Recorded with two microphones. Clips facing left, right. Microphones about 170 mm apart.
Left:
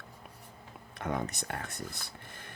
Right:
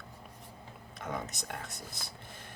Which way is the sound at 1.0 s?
60° left (ahead or behind).